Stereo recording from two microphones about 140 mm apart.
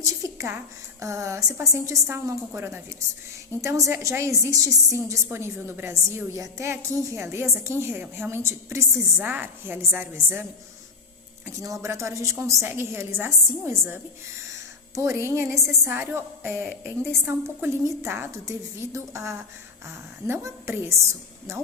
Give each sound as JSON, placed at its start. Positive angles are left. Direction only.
{"t": 0.0, "sound": "a woman's voice", "side_deg": -20}
{"t": 11.4, "sound": "a woman's voice", "side_deg": -25}
{"t": 16.6, "sound": "a woman's voice", "side_deg": 0}
{"t": 17.1, "sound": "a woman's voice", "side_deg": -15}